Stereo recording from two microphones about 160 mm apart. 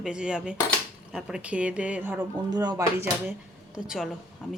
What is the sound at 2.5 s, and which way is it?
Speech, 25° right (ahead or behind).